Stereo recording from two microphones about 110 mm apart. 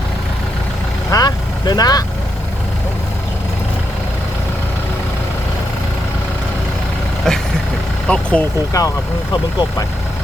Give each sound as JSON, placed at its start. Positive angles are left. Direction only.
{"t": 1.1, "sound": "vehicle", "side_deg": 40}
{"t": 7.3, "sound": "vehicle", "side_deg": 5}
{"t": 8.0, "sound": "speech", "side_deg": 10}
{"t": 8.7, "sound": "speech", "side_deg": 30}